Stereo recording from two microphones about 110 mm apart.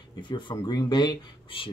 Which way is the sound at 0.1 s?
45° left (ahead or behind).